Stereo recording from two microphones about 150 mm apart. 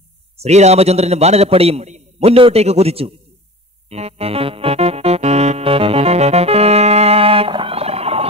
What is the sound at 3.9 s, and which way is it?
Music, 45° right (ahead or behind).